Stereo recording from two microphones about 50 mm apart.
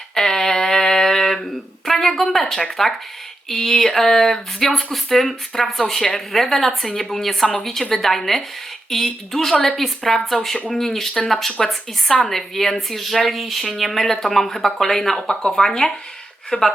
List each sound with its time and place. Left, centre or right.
0.1 s a sound: centre
3.5 s speech: centre
15.4 s speech: centre